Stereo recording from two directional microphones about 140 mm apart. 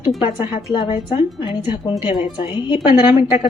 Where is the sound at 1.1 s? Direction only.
40° left (ahead or behind).